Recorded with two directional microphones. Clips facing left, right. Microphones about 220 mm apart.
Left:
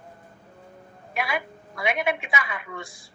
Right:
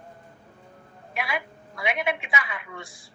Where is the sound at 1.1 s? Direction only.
45° left (ahead or behind).